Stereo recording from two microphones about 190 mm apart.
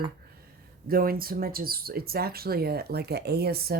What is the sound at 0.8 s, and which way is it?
Speech, 50° right (ahead or behind).